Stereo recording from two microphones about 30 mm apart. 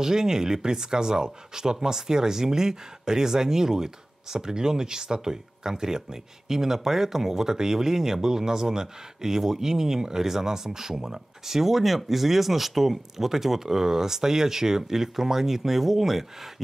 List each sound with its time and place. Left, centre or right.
0.0 s speech: centre